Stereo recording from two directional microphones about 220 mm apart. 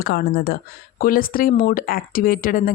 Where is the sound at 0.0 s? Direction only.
45° left (ahead or behind).